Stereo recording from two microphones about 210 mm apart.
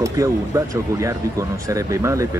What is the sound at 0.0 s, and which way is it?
A man's voice, 15° right (ahead or behind).